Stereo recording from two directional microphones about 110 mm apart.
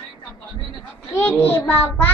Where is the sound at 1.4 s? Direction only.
20° left (ahead or behind).